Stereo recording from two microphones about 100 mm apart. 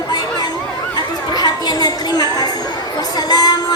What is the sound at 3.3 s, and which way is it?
Music, 40° left (ahead or behind).